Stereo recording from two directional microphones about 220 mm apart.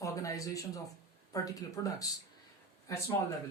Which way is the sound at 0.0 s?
15° left (ahead or behind).